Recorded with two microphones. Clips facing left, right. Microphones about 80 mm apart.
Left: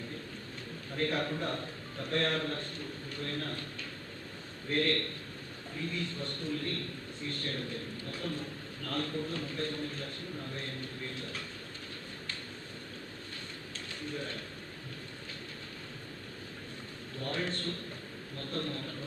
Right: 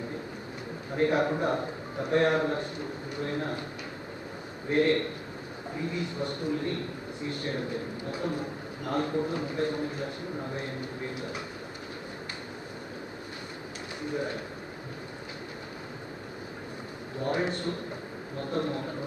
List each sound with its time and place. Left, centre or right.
0.9 s a man's voice: centre
4.7 s a man's voice: centre
14.0 s speech: centre
17.2 s a man's voice: centre